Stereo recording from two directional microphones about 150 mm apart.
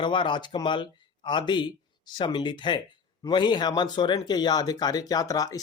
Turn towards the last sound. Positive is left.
turn(degrees=25)  # may be behind; listen again after turning